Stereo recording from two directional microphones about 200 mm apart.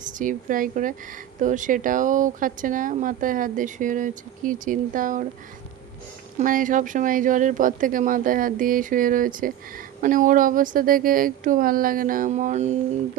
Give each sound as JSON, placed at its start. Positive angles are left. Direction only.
{"t": 0.0, "sound": "a woman's voice", "side_deg": -40}
{"t": 6.4, "sound": "speech", "side_deg": -40}